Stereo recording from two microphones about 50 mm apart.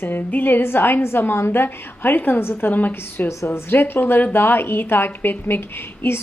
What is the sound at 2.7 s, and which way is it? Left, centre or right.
A woman's voice, left.